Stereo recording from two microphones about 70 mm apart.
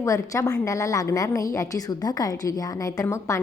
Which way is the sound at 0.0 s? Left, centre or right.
Left.